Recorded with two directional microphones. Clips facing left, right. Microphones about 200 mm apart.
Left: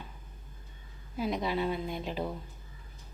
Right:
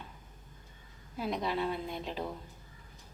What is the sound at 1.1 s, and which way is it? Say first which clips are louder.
A woman's voice: left 2 dB; centre (ahead or behind).